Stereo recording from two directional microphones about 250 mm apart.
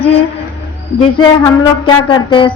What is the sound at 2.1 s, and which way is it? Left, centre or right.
Speech, centre.